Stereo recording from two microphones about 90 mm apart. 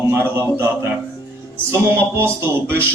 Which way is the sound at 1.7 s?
25° right (ahead or behind).